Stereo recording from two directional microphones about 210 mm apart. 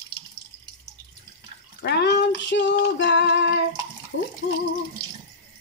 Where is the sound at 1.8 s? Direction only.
55° left (ahead or behind).